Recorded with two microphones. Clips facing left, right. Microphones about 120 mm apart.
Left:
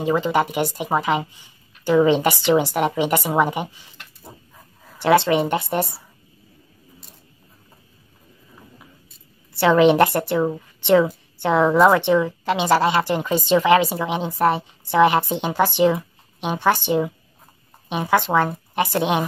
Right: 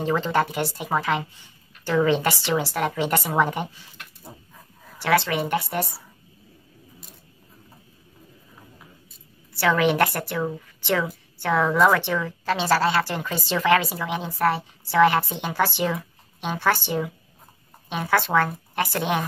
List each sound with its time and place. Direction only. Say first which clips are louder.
0.0 s a woman's voice: left 3 dB; 10° left (ahead or behind)
5.0 s a woman's voice: left 6 dB; 25° left (ahead or behind)
9.5 s a woman's voice: left 6 dB; 25° left (ahead or behind)